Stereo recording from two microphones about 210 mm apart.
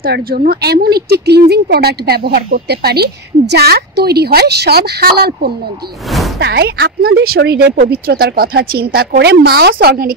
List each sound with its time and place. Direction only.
0.0 s speech: 45° right (ahead or behind)
6.0 s a sound: centre (ahead or behind)
6.4 s speech: 50° right (ahead or behind)